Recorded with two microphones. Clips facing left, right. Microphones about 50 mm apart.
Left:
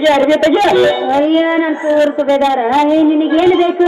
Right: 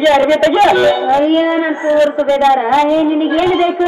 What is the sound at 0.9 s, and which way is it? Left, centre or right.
A man's voice, centre.